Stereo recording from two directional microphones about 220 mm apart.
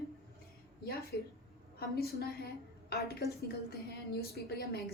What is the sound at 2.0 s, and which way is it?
A woman's voice, 45° left (ahead or behind).